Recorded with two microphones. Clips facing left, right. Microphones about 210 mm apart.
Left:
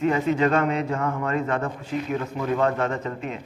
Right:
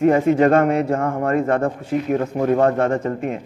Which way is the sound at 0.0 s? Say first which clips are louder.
Right 7 dB; 50° right (ahead or behind).